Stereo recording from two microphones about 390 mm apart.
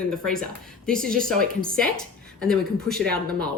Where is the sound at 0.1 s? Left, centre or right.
Centre.